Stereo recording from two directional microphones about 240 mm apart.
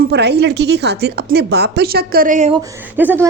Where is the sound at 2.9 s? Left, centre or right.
Centre.